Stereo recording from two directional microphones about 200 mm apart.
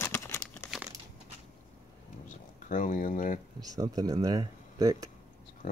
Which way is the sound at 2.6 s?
40° left (ahead or behind).